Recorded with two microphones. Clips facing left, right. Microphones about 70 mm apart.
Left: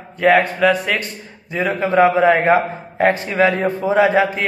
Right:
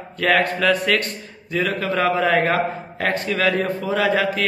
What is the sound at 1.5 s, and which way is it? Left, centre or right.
A man's voice, left.